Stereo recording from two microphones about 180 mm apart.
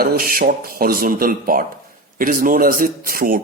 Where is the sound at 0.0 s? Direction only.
55° right (ahead or behind).